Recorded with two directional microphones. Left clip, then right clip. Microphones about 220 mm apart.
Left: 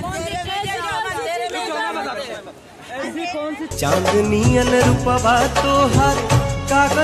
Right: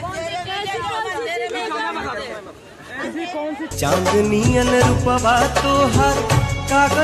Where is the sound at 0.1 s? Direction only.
50° left (ahead or behind).